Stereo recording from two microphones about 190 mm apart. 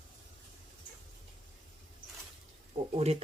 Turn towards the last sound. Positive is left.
turn(degrees=-35)  # may be behind; listen again after turning